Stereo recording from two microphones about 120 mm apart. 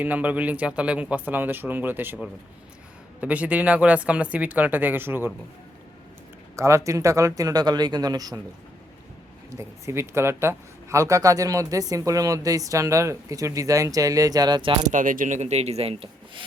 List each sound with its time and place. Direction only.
0.0 s speech: 10° right (ahead or behind)
3.2 s speech: 10° right (ahead or behind)
6.6 s speech: 25° right (ahead or behind)
9.6 s speech: 20° right (ahead or behind)
14.9 s speech: 90° right; by 16.4 s 55° right (ahead or behind)